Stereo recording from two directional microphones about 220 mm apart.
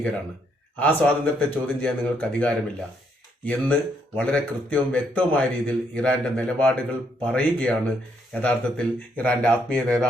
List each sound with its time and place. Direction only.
0.8 s speech: 5° left (ahead or behind)